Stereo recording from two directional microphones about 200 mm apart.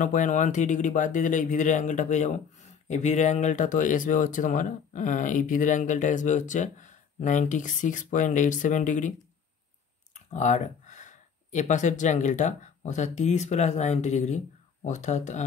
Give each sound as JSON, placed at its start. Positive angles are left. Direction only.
{"t": 0.0, "sound": "speech", "side_deg": 40}
{"t": 10.1, "sound": "speech", "side_deg": 35}